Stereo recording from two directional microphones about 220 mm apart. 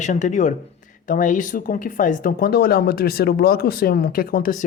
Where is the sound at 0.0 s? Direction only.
35° left (ahead or behind).